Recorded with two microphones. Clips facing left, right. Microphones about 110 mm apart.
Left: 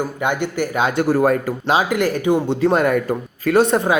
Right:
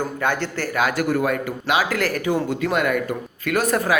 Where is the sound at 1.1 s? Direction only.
40° left (ahead or behind).